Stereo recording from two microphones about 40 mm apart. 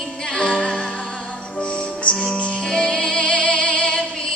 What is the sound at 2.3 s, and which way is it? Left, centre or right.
Music, left.